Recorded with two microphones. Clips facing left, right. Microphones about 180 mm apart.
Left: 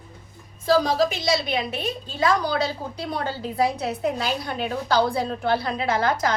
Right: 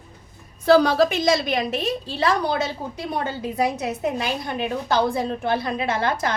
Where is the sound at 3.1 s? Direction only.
20° right (ahead or behind).